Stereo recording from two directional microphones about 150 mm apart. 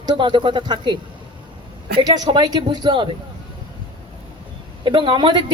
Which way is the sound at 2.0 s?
30° right (ahead or behind).